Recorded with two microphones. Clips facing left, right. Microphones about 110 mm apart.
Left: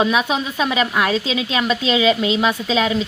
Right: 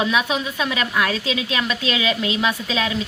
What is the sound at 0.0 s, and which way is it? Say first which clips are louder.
Speech: left 3 dB; 25° left (ahead or behind).